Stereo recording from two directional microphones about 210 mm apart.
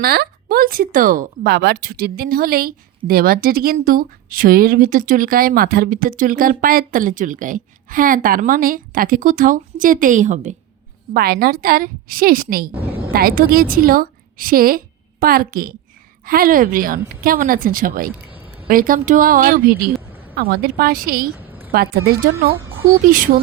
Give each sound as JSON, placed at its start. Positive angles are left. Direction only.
{"t": 0.0, "sound": "speech", "side_deg": -50}
{"t": 11.1, "sound": "a woman's voice", "side_deg": -45}
{"t": 21.3, "sound": "a sound", "side_deg": -10}
{"t": 21.7, "sound": "a woman's voice", "side_deg": -45}